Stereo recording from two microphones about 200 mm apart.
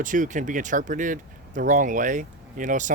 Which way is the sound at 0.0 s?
40° right (ahead or behind).